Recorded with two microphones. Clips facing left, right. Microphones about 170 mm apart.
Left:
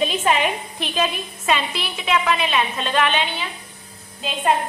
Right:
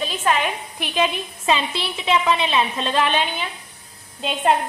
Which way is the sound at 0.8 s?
15° right (ahead or behind).